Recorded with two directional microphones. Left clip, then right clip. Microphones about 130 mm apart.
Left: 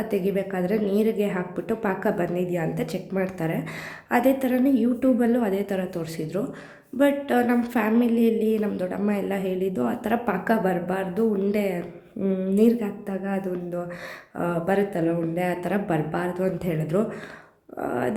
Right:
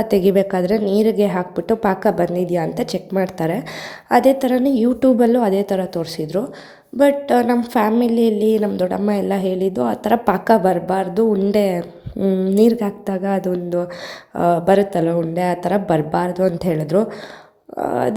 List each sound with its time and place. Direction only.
0.0 s a woman's voice: 50° right (ahead or behind)